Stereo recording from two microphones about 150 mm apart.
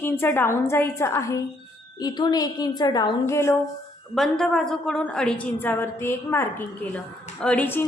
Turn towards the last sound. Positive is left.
turn(degrees=10)  # may be behind; listen again after turning